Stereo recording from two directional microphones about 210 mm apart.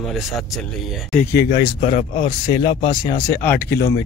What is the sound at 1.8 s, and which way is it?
Speech, 35° left (ahead or behind).